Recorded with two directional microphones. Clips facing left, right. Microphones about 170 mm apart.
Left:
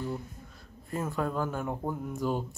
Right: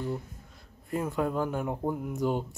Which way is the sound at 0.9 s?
15° right (ahead or behind).